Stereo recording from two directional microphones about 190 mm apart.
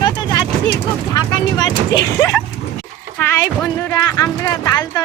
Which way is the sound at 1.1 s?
20° left (ahead or behind).